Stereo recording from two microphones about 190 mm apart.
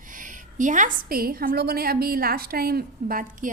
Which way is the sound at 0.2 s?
40° right (ahead or behind).